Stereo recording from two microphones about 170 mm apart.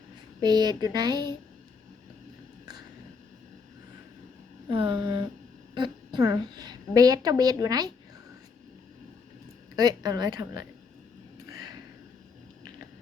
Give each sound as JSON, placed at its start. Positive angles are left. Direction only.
{"t": 0.4, "sound": "a woman's voice", "side_deg": -25}
{"t": 4.7, "sound": "a woman's voice", "side_deg": -30}
{"t": 9.7, "sound": "a woman's voice", "side_deg": -25}